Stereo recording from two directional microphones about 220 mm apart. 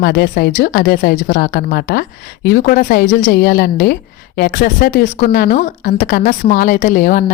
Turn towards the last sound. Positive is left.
turn(degrees=40)  # may be behind; listen again after turning